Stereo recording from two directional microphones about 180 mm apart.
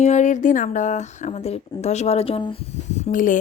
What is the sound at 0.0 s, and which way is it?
Speech, 40° left (ahead or behind).